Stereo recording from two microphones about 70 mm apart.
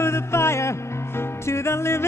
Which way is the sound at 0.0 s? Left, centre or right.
Left.